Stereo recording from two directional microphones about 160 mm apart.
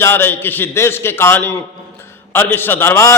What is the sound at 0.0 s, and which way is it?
A man's voice, 15° left (ahead or behind).